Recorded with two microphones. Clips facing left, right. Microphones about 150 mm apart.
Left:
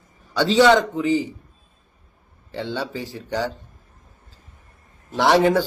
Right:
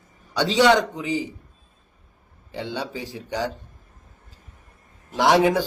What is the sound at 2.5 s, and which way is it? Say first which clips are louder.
Speech: left 2 dB; 15° right (ahead or behind).